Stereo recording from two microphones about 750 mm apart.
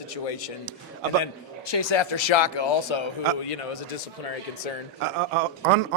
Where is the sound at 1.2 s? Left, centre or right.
Left.